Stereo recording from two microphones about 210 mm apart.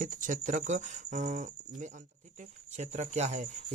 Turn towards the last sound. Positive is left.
turn(degrees=-35)  # may be behind; listen again after turning